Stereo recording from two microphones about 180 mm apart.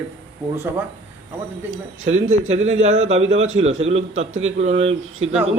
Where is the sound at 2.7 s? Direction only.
40° right (ahead or behind).